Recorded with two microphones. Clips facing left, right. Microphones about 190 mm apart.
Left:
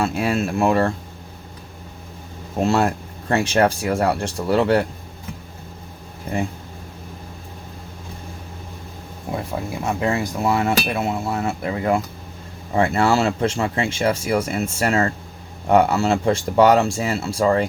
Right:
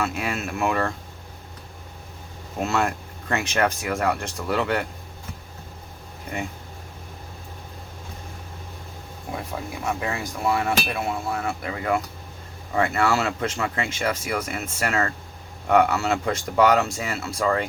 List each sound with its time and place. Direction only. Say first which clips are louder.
0.0 s speech: left 6 dB; 30° left (ahead or behind)
2.6 s speech: left 5 dB; 35° left (ahead or behind)
9.8 s speech: left 6 dB; 25° left (ahead or behind)